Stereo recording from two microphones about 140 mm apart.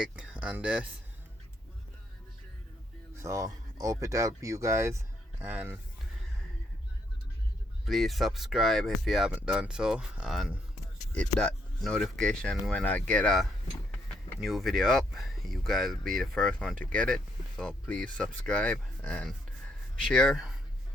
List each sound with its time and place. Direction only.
0.0 s speech: 10° right (ahead or behind)
3.2 s speech: 20° right (ahead or behind)
7.9 s speech: centre (ahead or behind)